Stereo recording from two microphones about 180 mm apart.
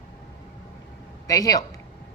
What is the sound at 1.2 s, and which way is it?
Speech, 20° left (ahead or behind).